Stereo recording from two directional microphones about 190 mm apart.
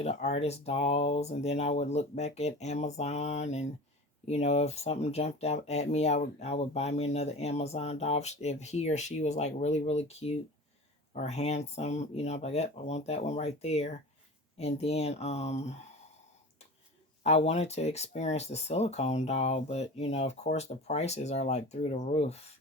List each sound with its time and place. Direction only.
0.0 s speech: 35° left (ahead or behind)
17.2 s speech: 35° left (ahead or behind)